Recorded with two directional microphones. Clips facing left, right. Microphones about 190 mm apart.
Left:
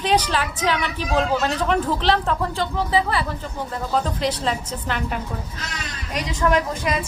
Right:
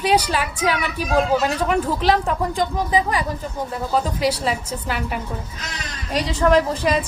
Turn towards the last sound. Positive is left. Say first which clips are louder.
# right 4 dB
turn(degrees=-35)  # may be behind; listen again after turning